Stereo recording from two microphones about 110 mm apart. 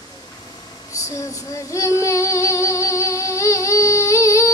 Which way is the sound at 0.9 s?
30° left (ahead or behind).